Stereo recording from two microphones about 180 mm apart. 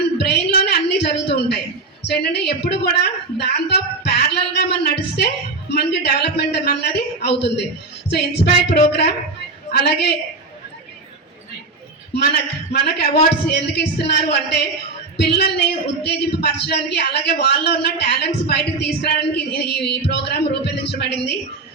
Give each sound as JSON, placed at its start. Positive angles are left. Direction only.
{"t": 0.2, "sound": "a sound", "side_deg": 65}
{"t": 2.0, "sound": "a woman's voice", "side_deg": 65}
{"t": 12.7, "sound": "a woman's voice", "side_deg": 65}